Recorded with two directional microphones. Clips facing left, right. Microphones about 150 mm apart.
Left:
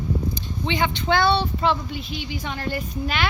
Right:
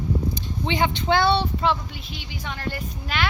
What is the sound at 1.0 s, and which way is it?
Child singing, 25° right (ahead or behind).